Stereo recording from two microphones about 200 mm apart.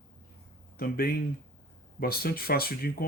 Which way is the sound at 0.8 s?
50° left (ahead or behind).